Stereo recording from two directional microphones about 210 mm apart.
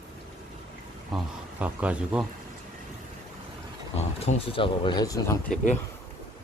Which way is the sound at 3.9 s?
30° left (ahead or behind).